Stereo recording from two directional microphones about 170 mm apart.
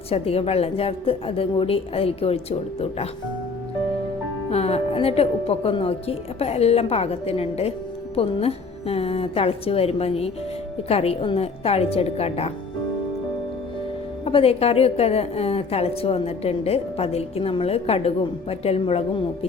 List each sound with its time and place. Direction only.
0.1 s a woman's voice: 35° left (ahead or behind)
4.4 s a woman's voice: 35° left (ahead or behind)
14.3 s a woman's voice: 35° left (ahead or behind)